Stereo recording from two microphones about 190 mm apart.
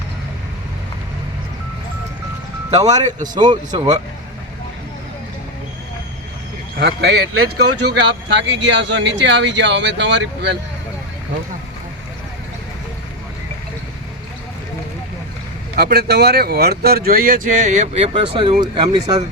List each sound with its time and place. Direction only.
2.7 s speech: 20° right (ahead or behind)
3.0 s speech: 40° right (ahead or behind)
3.3 s speech: 20° right (ahead or behind)
6.7 s speech: 60° right (ahead or behind)
15.7 s speech: 55° right (ahead or behind); by 19.2 s 20° right (ahead or behind)